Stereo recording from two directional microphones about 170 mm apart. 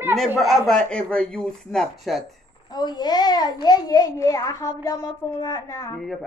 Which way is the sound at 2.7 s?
25° left (ahead or behind).